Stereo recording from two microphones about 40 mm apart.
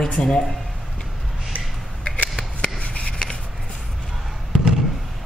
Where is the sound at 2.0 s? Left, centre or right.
Left.